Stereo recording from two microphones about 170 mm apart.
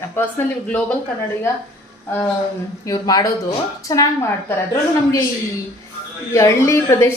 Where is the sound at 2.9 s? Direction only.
25° left (ahead or behind).